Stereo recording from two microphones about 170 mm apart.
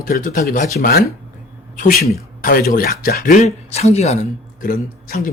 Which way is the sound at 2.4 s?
60° left (ahead or behind).